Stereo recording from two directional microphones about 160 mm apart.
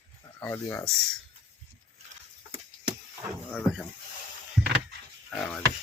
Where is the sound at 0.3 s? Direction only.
15° left (ahead or behind).